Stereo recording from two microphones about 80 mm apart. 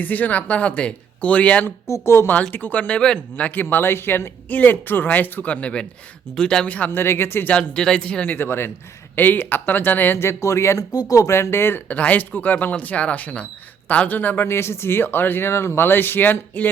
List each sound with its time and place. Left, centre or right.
0.0 s speech: left
1.9 s speech: left
2.3 s speech: left
6.7 s speech: centre
7.0 s speech: left
7.8 s speech: centre
8.3 s speech: left
11.3 s speech: left
11.9 s speech: centre